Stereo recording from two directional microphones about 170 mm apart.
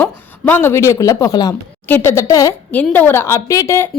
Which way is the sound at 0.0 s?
10° left (ahead or behind).